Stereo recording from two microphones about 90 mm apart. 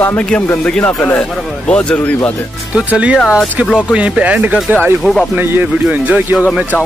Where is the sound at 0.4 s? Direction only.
15° left (ahead or behind).